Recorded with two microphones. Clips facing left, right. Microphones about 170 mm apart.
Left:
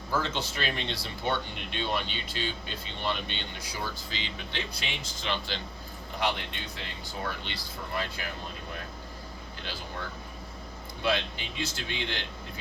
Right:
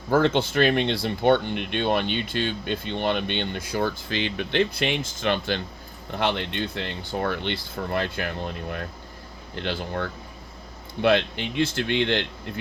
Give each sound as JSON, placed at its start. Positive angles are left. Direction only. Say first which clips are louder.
{"t": 0.1, "sound": "speech", "louder": "right 11 dB", "side_deg": -55}
{"t": 9.6, "sound": "speech", "louder": "right 11 dB", "side_deg": -65}